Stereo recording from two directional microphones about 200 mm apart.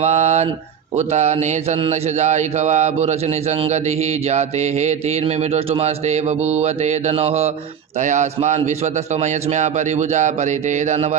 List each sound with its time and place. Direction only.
0.0 s mantra: 35° right (ahead or behind)